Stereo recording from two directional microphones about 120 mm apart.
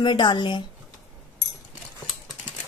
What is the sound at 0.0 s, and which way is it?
Speech, 40° left (ahead or behind).